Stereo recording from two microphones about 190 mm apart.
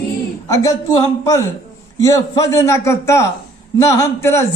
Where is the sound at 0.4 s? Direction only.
15° left (ahead or behind).